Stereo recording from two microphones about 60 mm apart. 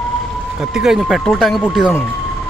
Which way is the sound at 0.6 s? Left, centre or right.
Centre.